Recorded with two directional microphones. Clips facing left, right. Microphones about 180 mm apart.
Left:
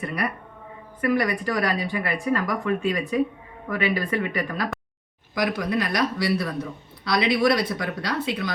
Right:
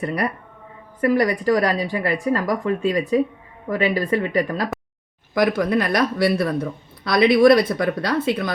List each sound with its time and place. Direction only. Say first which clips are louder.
0.0 s speech: right 4 dB; 40° right (ahead or behind)
5.3 s speech: right 6 dB; 50° right (ahead or behind)